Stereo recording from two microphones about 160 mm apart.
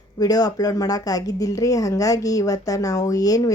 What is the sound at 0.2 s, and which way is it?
Speech, 25° left (ahead or behind).